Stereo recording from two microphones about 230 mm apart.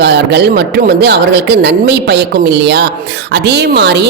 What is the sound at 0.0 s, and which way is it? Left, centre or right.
Speech, right.